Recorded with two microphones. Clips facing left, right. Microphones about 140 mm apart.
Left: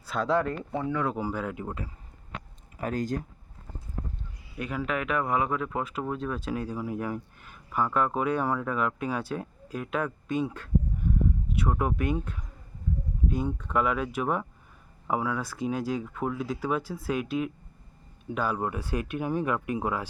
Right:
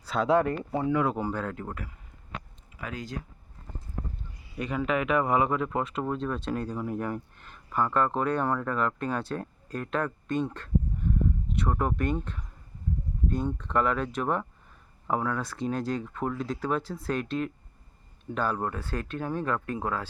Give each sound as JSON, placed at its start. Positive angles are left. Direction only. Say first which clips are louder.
{"t": 0.0, "sound": "a sound", "louder": "right 2 dB", "side_deg": 0}
{"t": 0.9, "sound": "speech", "louder": "right 3 dB", "side_deg": -10}
{"t": 1.1, "sound": "speech", "louder": "even", "side_deg": 5}
{"t": 2.8, "sound": "speech", "louder": "left 8 dB", "side_deg": 45}
{"t": 4.5, "sound": "speech", "louder": "right 3 dB", "side_deg": 0}